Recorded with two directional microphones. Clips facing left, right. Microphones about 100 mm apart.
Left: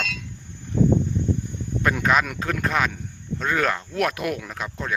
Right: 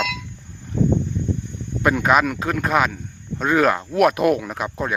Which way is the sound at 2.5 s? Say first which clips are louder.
Right 4 dB; 10° right (ahead or behind).